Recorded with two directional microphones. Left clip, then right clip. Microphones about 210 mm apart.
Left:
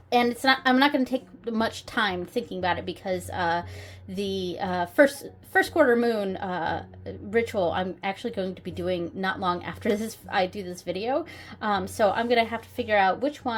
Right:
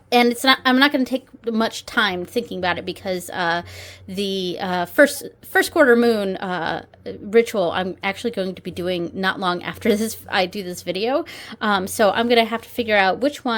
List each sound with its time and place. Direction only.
0.1 s a woman's voice: 35° right (ahead or behind)